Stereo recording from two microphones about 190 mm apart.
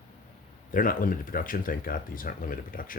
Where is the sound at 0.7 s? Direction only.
45° left (ahead or behind).